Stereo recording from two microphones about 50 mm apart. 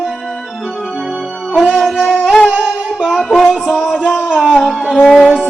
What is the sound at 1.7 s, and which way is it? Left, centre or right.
Music, centre.